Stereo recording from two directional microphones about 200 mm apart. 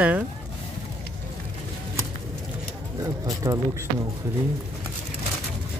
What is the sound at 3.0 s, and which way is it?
Speech, 15° right (ahead or behind).